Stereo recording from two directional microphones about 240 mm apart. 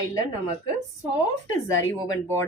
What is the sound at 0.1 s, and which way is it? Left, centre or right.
Speech, centre.